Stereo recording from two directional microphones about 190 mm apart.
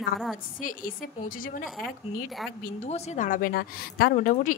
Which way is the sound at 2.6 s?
40° left (ahead or behind).